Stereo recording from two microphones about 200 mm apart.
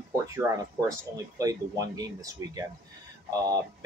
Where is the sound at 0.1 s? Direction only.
15° right (ahead or behind).